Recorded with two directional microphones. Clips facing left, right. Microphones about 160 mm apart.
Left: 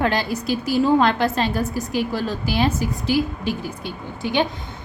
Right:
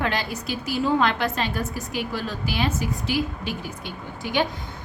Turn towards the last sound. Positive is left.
turn(degrees=25)  # may be behind; listen again after turning